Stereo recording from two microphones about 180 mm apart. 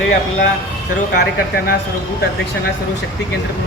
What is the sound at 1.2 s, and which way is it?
Speech, 55° left (ahead or behind).